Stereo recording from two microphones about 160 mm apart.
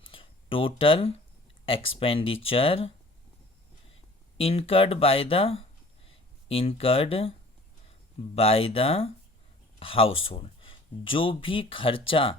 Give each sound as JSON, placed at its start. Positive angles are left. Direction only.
{"t": 0.0, "sound": "a sound", "side_deg": 35}
{"t": 1.6, "sound": "speech", "side_deg": 35}
{"t": 4.4, "sound": "speech", "side_deg": 35}
{"t": 8.4, "sound": "speech", "side_deg": 35}